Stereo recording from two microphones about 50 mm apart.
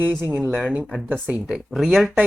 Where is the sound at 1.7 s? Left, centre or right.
Centre.